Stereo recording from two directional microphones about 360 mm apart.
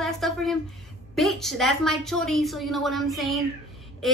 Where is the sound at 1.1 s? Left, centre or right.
Centre.